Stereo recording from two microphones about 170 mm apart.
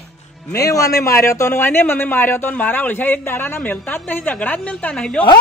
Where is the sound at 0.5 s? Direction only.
20° left (ahead or behind).